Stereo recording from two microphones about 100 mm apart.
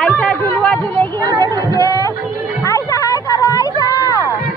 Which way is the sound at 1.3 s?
45° right (ahead or behind).